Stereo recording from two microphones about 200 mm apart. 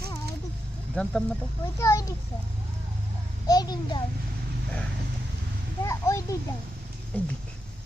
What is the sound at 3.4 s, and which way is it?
Speech, 20° left (ahead or behind).